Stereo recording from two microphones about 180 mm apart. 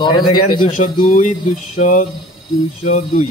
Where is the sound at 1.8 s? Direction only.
45° left (ahead or behind).